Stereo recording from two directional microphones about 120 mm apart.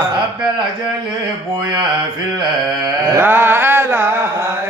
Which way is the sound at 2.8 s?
20° right (ahead or behind).